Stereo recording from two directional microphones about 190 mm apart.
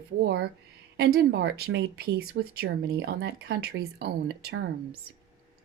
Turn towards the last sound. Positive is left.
turn(degrees=-60)  # may be behind; listen again after turning